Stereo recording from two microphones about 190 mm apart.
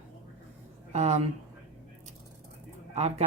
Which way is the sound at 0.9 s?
35° right (ahead or behind).